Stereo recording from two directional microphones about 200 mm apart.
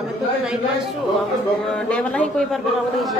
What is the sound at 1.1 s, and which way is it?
A man's voice, centre (ahead or behind).